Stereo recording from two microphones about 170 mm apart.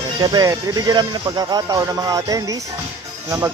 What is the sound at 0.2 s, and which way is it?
Speech, 20° right (ahead or behind).